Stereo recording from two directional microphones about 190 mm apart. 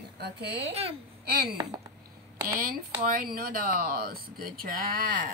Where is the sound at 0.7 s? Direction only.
30° right (ahead or behind).